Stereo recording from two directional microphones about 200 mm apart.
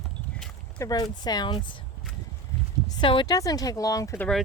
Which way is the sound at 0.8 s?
20° left (ahead or behind).